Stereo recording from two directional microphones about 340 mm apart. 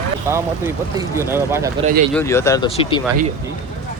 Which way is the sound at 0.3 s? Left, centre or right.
Centre.